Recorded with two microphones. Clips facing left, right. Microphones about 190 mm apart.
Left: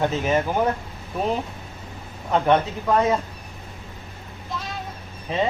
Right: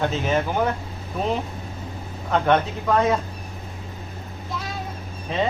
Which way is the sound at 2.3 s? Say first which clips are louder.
Left 1 dB; 10° left (ahead or behind).